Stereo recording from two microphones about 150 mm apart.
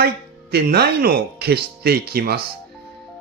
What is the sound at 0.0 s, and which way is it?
Speech, 90° right.